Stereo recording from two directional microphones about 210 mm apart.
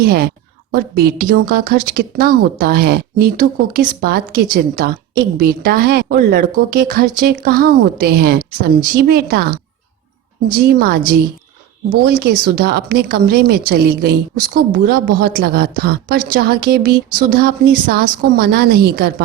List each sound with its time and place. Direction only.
0.0 s a woman's voice: 45° right (ahead or behind)
12.0 s a woman's voice: 45° right (ahead or behind)